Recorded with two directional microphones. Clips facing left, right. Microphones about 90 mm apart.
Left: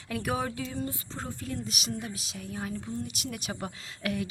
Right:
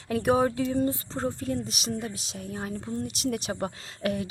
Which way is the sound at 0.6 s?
50° right (ahead or behind).